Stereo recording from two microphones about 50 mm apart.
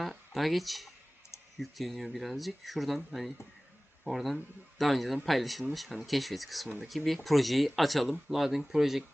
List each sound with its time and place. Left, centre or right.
0.0 s speech: centre